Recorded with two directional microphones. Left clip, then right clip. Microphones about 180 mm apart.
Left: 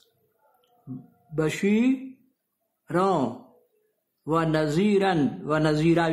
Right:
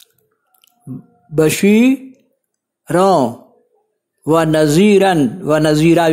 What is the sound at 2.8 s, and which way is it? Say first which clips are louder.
Speech: right 12 dB; 35° right (ahead or behind).